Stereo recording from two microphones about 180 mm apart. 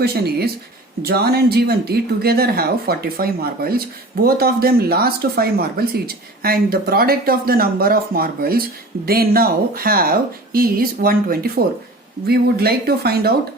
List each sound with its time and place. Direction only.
0.0 s speech: 60° right (ahead or behind)